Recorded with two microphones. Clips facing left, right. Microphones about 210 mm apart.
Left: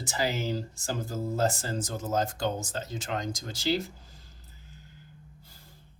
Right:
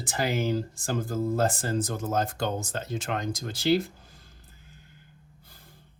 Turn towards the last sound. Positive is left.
turn(degrees=-55)  # may be behind; listen again after turning